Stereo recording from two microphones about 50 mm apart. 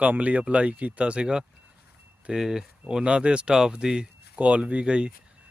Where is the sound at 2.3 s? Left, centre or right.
Centre.